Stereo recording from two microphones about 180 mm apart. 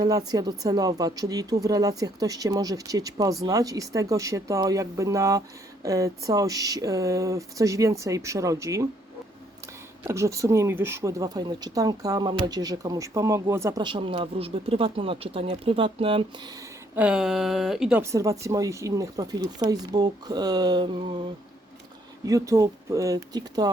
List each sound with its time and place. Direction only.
0.0 s speech: 20° right (ahead or behind)
10.0 s speech: 15° right (ahead or behind)
16.9 s speech: 5° right (ahead or behind)
18.0 s speech: 15° right (ahead or behind)
22.3 s speech: 20° right (ahead or behind)